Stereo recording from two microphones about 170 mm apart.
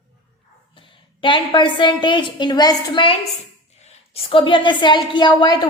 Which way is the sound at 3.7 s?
35° left (ahead or behind).